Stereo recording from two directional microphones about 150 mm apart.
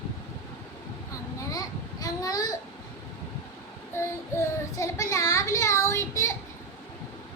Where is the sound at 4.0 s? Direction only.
20° left (ahead or behind).